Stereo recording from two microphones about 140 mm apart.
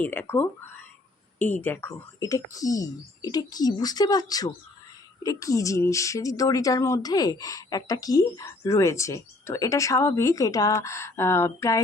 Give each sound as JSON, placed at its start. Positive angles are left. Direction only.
{"t": 0.0, "sound": "speech", "side_deg": 15}